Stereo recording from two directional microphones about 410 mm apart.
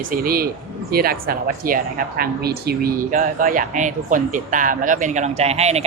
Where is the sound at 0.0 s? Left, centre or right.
Right.